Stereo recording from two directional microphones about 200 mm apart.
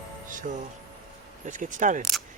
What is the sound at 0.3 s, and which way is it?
Music, 40° right (ahead or behind).